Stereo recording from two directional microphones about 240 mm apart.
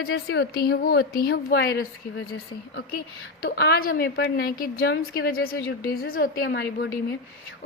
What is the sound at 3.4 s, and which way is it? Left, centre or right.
A woman's voice, left.